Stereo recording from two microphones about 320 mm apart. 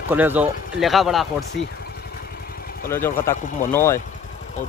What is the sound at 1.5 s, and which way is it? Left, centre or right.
Vehicle, left.